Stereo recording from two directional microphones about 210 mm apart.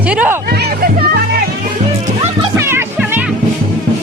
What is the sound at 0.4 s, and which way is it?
Music, 50° right (ahead or behind).